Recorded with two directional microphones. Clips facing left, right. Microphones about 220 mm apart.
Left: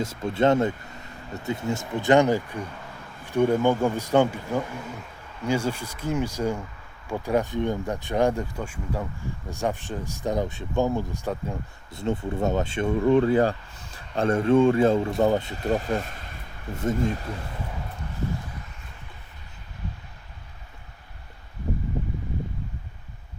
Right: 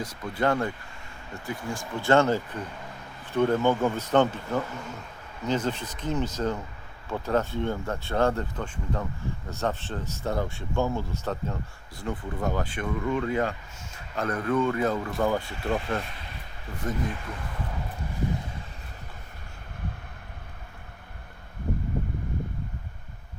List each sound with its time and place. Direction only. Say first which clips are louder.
0.0 s speech: left 5 dB; 25° left (ahead or behind)
11.9 s speech: left 6 dB; 25° left (ahead or behind)
15.5 s speech: left 3 dB; 40° left (ahead or behind)
16.8 s speech: left 6 dB; 25° left (ahead or behind)